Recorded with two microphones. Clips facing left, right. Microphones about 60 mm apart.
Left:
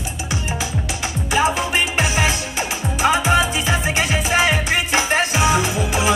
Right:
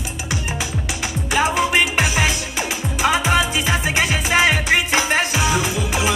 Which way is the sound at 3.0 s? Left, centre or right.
Left.